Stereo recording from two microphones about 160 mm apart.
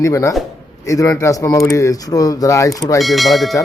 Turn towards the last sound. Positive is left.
turn(degrees=0)  # may be behind; listen again after turning